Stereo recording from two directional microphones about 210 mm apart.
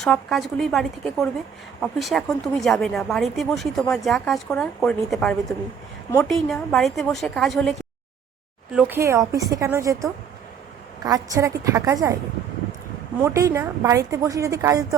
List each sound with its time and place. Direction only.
0.0 s speech: centre (ahead or behind)
8.7 s a woman's voice: 10° right (ahead or behind)
13.2 s a woman's voice: 15° right (ahead or behind)